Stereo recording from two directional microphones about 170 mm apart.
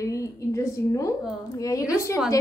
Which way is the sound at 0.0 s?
20° left (ahead or behind).